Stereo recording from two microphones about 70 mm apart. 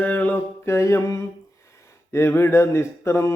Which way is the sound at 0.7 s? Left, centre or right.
Left.